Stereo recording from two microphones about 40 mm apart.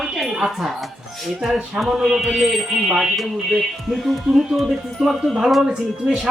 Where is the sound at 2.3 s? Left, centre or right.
Centre.